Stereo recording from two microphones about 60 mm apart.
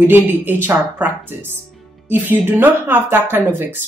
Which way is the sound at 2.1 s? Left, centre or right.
Right.